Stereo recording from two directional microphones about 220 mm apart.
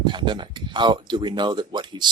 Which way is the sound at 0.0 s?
20° right (ahead or behind).